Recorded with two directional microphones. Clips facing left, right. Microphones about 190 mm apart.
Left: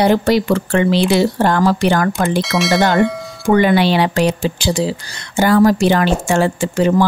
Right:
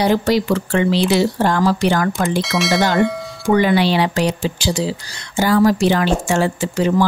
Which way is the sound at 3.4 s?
55° left (ahead or behind).